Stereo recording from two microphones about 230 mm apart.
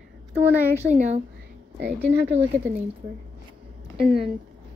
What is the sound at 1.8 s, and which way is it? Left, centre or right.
Speech, right.